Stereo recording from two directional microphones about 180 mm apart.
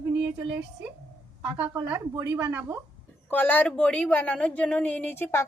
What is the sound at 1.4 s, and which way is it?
A woman's voice, 15° right (ahead or behind).